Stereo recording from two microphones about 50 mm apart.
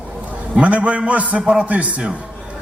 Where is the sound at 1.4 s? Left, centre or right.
Centre.